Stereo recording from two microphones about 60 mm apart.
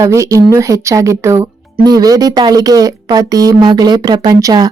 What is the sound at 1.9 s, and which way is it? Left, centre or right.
A woman's voice, right.